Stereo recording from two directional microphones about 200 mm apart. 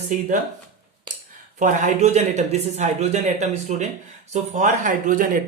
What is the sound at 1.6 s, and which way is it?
Speech, 35° right (ahead or behind).